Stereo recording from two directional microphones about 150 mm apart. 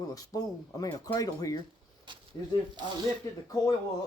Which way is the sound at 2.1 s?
30° right (ahead or behind).